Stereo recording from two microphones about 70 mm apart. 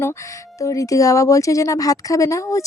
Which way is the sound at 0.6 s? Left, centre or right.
Left.